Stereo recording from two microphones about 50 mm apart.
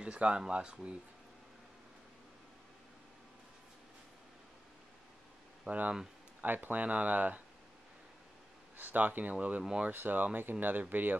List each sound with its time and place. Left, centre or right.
0.0 s speech: right
5.7 s speech: right
8.7 s speech: right